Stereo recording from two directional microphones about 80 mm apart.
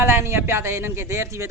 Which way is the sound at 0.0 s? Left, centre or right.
Right.